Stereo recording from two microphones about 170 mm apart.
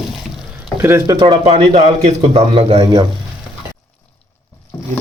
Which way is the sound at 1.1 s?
30° right (ahead or behind).